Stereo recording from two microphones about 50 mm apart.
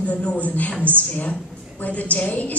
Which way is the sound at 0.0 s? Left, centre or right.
Left.